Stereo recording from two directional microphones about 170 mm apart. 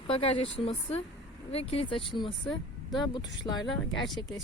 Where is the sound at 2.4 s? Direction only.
Centre (ahead or behind).